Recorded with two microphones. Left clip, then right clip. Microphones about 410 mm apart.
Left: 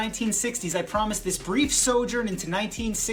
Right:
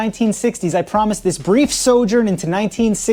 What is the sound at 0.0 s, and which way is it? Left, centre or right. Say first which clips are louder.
Speech: right 10 dB; centre.